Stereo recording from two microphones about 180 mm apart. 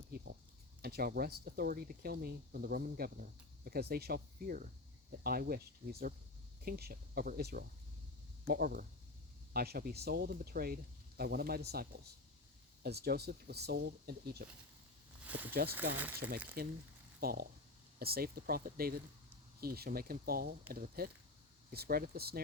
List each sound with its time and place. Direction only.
0.8 s speech: 60° right (ahead or behind)
15.2 s a sound: 10° right (ahead or behind)
16.0 s speech: 10° right (ahead or behind)
16.6 s speech: 60° right (ahead or behind)